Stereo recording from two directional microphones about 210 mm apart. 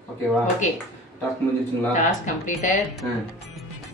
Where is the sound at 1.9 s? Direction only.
35° left (ahead or behind).